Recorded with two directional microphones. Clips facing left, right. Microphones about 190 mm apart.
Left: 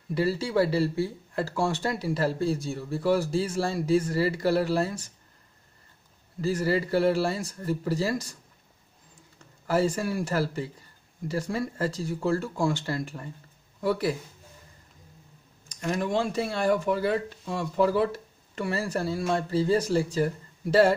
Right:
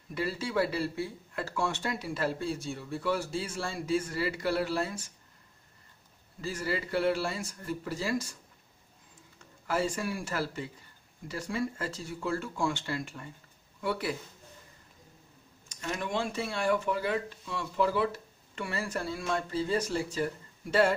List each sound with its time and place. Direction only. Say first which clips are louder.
0.1 s speech: left 6 dB; 30° left (ahead or behind)
6.4 s speech: left 8 dB; 40° left (ahead or behind)
9.7 s speech: left 6 dB; 40° left (ahead or behind)
15.7 s speech: left 6 dB; 40° left (ahead or behind)